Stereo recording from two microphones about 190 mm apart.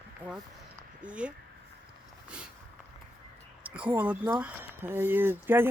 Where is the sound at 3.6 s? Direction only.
10° right (ahead or behind).